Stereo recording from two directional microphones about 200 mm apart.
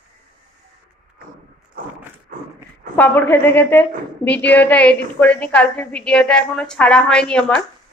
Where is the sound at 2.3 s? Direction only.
45° right (ahead or behind).